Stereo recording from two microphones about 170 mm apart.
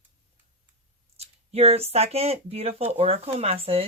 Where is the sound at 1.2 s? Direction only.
35° right (ahead or behind).